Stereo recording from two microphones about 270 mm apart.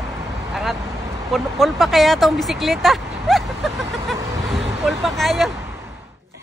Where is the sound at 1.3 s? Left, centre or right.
Centre.